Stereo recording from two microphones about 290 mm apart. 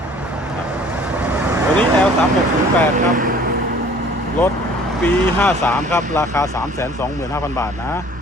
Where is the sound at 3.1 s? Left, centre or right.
Right.